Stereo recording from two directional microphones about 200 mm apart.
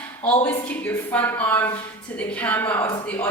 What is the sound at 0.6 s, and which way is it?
A woman's voice, 10° left (ahead or behind).